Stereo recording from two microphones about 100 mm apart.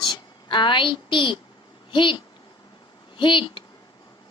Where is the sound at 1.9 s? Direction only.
55° left (ahead or behind).